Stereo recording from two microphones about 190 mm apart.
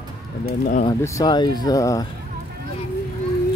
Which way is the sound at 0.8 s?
20° left (ahead or behind).